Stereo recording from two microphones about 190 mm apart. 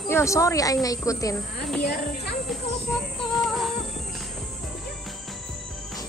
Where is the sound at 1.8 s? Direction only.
60° left (ahead or behind).